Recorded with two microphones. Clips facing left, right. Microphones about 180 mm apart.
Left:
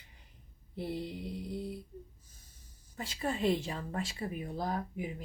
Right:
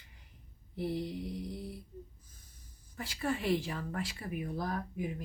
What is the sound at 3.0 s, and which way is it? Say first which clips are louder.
Speech: left 1 dB; 20° left (ahead or behind).